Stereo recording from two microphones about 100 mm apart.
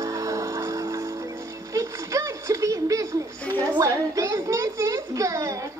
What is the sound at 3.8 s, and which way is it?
A child's voice, 30° right (ahead or behind).